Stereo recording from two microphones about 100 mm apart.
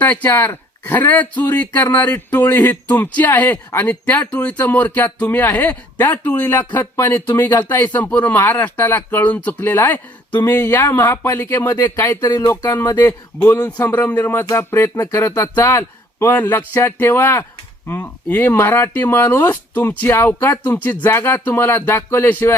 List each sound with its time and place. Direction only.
0.0 s speech: 15° left (ahead or behind)